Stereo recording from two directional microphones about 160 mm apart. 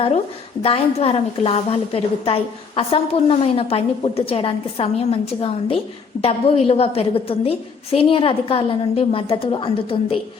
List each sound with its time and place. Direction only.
0.6 s a woman's voice: 40° left (ahead or behind)